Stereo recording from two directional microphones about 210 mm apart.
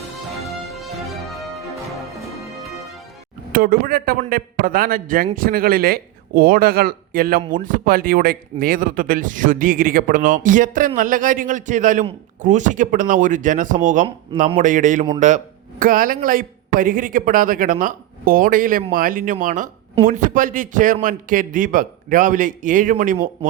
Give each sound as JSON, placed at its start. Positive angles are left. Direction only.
{"t": 0.4, "sound": "music", "side_deg": 0}
{"t": 3.5, "sound": "a man's voice", "side_deg": -45}